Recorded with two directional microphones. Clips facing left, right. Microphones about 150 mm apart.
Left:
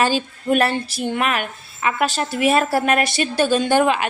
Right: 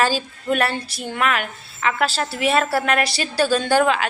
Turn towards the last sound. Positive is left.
turn(degrees=20)  # may be behind; listen again after turning